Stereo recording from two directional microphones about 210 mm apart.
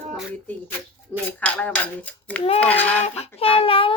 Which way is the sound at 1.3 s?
5° left (ahead or behind).